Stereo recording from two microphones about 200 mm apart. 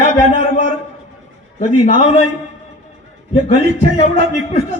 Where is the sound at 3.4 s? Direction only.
35° left (ahead or behind).